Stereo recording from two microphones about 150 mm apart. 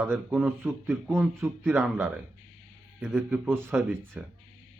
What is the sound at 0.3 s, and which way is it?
Speech, 10° right (ahead or behind).